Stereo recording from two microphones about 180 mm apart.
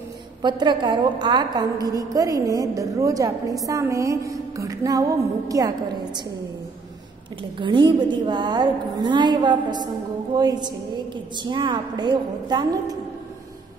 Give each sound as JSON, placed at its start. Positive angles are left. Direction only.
{"t": 0.4, "sound": "a woman's voice", "side_deg": -25}
{"t": 3.6, "sound": "music", "side_deg": -15}
{"t": 5.5, "sound": "a woman's voice", "side_deg": -20}
{"t": 7.5, "sound": "a woman's voice", "side_deg": -25}